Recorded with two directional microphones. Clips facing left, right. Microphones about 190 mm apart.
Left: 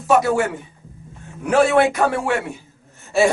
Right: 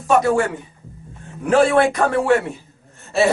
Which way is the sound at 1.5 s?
5° left (ahead or behind).